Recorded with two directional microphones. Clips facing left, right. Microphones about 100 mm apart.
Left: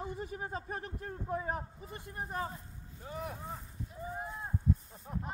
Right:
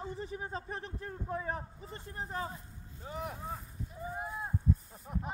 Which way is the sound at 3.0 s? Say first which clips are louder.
Right 1 dB; 10° right (ahead or behind).